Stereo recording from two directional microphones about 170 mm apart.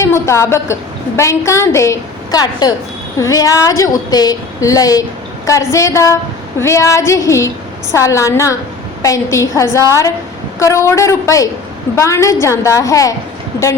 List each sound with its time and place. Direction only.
0.0 s a woman's voice: 15° left (ahead or behind)